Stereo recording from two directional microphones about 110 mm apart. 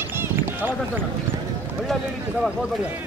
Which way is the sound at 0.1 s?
20° right (ahead or behind).